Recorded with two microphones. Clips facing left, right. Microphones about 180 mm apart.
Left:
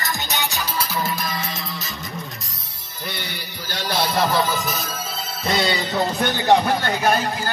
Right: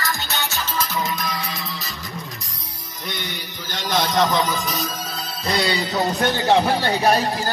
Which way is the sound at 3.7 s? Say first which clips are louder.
Right 1 dB; 10° left (ahead or behind).